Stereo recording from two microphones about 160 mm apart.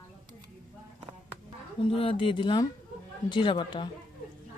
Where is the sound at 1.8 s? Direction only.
35° left (ahead or behind).